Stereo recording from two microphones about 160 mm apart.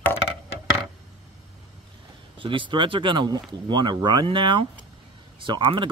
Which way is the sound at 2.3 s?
30° right (ahead or behind).